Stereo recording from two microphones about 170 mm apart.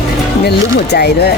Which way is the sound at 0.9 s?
75° left (ahead or behind).